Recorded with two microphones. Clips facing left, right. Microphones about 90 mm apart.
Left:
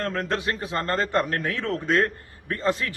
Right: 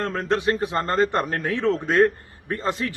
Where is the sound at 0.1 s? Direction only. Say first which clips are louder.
Right 4 dB; 25° right (ahead or behind).